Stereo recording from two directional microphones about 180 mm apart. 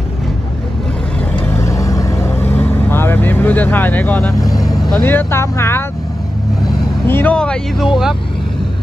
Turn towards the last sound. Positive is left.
turn(degrees=5)  # may be behind; listen again after turning